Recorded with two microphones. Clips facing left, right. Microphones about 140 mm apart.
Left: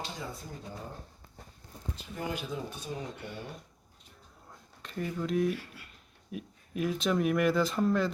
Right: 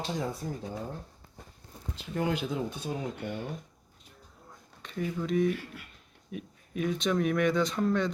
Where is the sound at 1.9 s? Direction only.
70° right (ahead or behind).